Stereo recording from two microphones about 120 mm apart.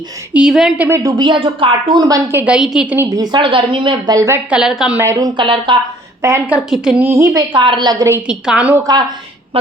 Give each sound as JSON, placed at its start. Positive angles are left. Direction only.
{"t": 0.3, "sound": "a woman's voice", "side_deg": -5}
{"t": 0.9, "sound": "a woman's voice", "side_deg": -25}
{"t": 2.3, "sound": "a woman's voice", "side_deg": -10}
{"t": 3.1, "sound": "speech", "side_deg": -35}
{"t": 4.1, "sound": "a woman's voice", "side_deg": -25}
{"t": 4.4, "sound": "a woman's voice", "side_deg": -5}
{"t": 5.1, "sound": "speech", "side_deg": -35}
{"t": 6.5, "sound": "a woman's voice", "side_deg": -5}
{"t": 7.0, "sound": "a woman's voice", "side_deg": -20}
{"t": 7.3, "sound": "a woman's voice", "side_deg": -40}
{"t": 8.3, "sound": "a woman's voice", "side_deg": -10}
{"t": 8.7, "sound": "a woman's voice", "side_deg": -30}